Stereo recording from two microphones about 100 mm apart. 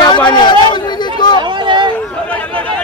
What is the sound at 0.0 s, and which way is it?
Chatter, 50° left (ahead or behind).